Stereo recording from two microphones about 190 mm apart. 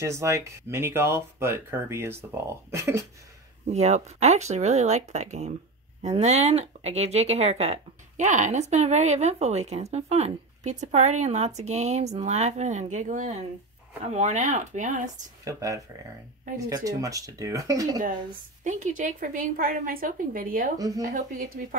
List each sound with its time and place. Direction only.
0.0 s speech: 15° right (ahead or behind)
3.7 s speech: 35° right (ahead or behind)
15.4 s speech: 15° right (ahead or behind)
18.6 s a woman's voice: 40° right (ahead or behind)
20.7 s speech: 20° right (ahead or behind)
21.0 s a woman's voice: 45° right (ahead or behind)